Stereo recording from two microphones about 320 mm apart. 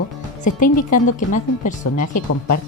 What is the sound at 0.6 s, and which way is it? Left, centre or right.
A woman's voice, left.